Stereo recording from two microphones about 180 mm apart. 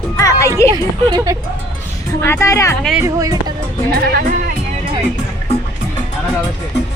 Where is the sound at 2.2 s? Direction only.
15° left (ahead or behind).